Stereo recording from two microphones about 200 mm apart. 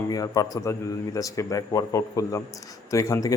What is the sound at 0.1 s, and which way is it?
Speech, 20° left (ahead or behind).